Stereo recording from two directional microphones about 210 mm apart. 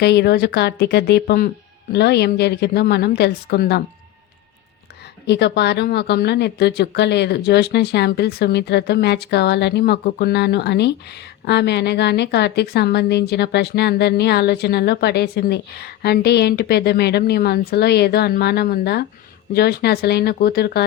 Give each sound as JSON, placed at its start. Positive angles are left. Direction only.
{"t": 0.0, "sound": "a woman's voice", "side_deg": 50}
{"t": 5.2, "sound": "a woman's voice", "side_deg": 55}